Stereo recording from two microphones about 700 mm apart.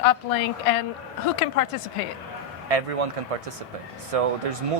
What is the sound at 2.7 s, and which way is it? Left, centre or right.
Speech, right.